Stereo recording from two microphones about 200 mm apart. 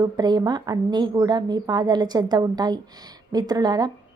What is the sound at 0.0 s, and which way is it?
A woman's voice, 20° right (ahead or behind).